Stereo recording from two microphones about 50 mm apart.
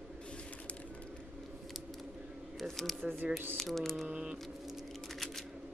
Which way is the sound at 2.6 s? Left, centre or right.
Centre.